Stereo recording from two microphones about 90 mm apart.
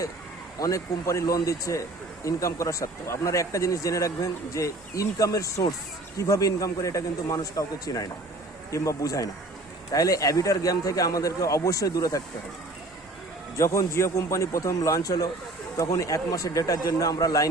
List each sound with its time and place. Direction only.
0.6 s speech: 35° left (ahead or behind)
13.6 s speech: 35° left (ahead or behind)